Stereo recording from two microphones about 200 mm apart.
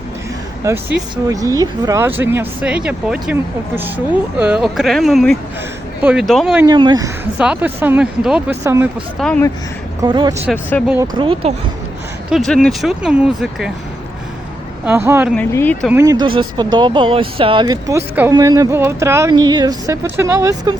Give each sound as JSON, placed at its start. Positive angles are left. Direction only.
{"t": 0.7, "sound": "speech", "side_deg": -15}
{"t": 6.7, "sound": "speech", "side_deg": -20}
{"t": 7.3, "sound": "speech", "side_deg": -5}
{"t": 9.1, "sound": "speech", "side_deg": 5}
{"t": 10.0, "sound": "speech", "side_deg": -20}
{"t": 10.5, "sound": "speech", "side_deg": 5}
{"t": 11.2, "sound": "speech", "side_deg": -25}
{"t": 12.3, "sound": "speech", "side_deg": 0}
{"t": 14.8, "sound": "speech", "side_deg": -10}
{"t": 15.3, "sound": "speech", "side_deg": 10}
{"t": 15.9, "sound": "speech", "side_deg": -15}